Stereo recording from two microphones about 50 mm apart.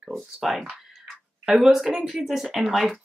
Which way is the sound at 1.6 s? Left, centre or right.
Centre.